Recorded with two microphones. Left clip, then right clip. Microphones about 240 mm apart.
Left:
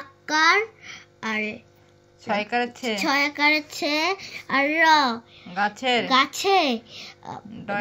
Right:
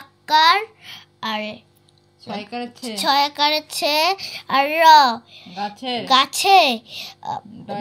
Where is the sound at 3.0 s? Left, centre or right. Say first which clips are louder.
Right 5 dB; right.